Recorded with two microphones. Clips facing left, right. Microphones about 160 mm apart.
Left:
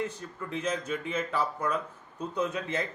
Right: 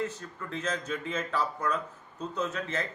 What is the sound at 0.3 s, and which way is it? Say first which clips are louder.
A man's voice: left 3 dB; 10° left (ahead or behind).